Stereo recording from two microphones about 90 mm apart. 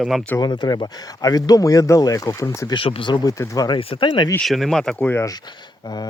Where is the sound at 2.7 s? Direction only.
75° left (ahead or behind).